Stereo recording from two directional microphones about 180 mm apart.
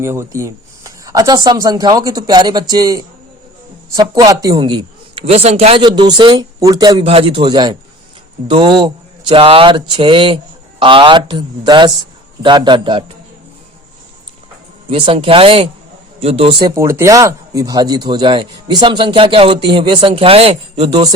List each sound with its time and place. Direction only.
0.0 s speech: 15° right (ahead or behind)
14.8 s speech: 30° right (ahead or behind)